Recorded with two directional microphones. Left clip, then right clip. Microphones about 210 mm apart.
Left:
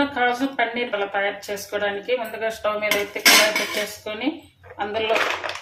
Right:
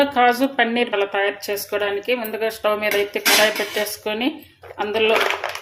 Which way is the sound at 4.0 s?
50° right (ahead or behind).